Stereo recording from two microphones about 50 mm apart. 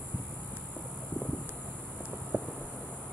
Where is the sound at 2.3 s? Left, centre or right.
Right.